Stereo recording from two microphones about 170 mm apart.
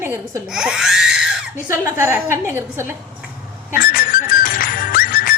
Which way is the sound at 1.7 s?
15° right (ahead or behind).